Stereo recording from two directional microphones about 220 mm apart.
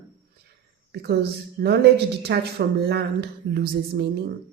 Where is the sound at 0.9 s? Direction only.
50° right (ahead or behind).